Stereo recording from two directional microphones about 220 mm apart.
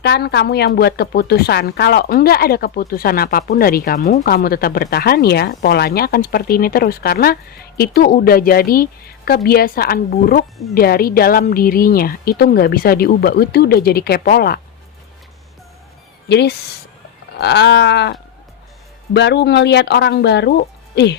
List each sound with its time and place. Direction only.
0.0 s speech: 50° left (ahead or behind)
4.0 s speech: 35° left (ahead or behind)
16.3 s speech: 50° left (ahead or behind)